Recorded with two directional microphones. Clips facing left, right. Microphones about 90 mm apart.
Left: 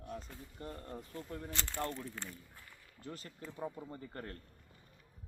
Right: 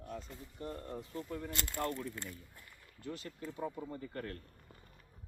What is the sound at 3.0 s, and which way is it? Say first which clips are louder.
Speech: right 4 dB; 40° left (ahead or behind).